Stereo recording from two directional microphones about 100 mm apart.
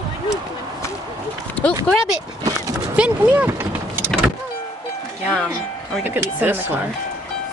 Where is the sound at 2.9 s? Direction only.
15° right (ahead or behind).